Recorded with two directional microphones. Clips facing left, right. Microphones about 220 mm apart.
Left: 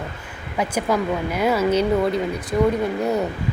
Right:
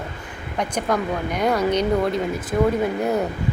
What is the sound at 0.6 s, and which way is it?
A woman's voice, 5° left (ahead or behind).